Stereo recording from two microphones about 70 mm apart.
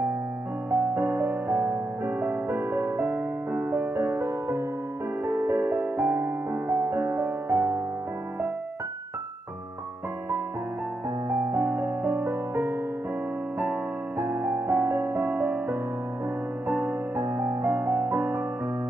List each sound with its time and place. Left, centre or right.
0.7 s music: right
11.2 s music: right
17.7 s music: right
18.0 s music: right